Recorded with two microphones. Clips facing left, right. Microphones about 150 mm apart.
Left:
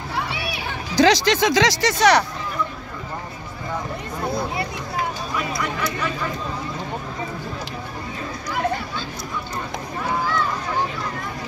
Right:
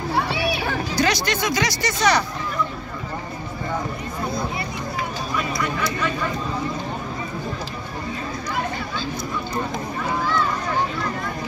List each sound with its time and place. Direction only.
0.9 s speech: 90° left